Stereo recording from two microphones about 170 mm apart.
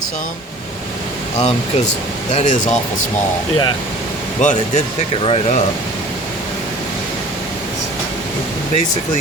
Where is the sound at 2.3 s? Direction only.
45° left (ahead or behind).